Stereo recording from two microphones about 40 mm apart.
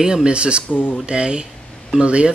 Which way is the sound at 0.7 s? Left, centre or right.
Left.